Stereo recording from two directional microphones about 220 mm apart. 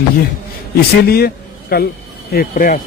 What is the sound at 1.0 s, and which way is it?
A man's voice, 45° left (ahead or behind).